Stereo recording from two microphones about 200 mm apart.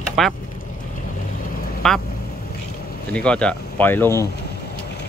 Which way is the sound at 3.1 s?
5° left (ahead or behind).